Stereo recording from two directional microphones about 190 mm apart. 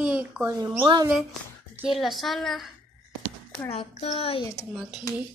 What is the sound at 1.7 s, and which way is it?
Speech, 5° right (ahead or behind).